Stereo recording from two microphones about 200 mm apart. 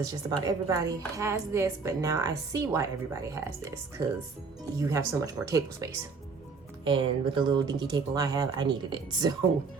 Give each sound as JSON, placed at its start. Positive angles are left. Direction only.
{"t": 0.1, "sound": "speech", "side_deg": -20}